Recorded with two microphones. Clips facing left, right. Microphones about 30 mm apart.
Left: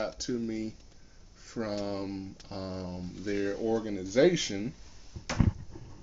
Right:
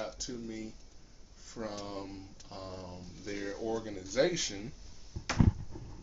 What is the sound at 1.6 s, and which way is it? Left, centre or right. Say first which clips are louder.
Speech: left 7 dB; left.